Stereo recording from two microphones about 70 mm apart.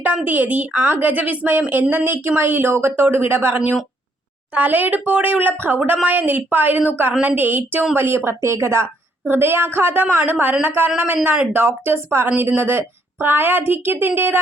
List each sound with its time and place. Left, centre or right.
0.3 s speech: right